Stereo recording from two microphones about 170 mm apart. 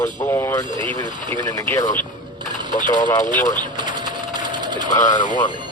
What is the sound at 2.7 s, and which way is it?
Speech, 50° left (ahead or behind).